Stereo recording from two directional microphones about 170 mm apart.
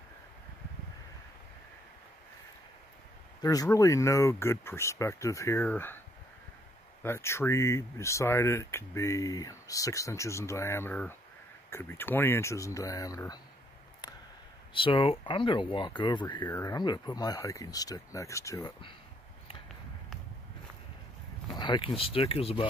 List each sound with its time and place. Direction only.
3.4 s speech: 20° left (ahead or behind)
7.0 s speech: 15° left (ahead or behind)
14.7 s speech: 30° left (ahead or behind)
21.5 s speech: 30° left (ahead or behind)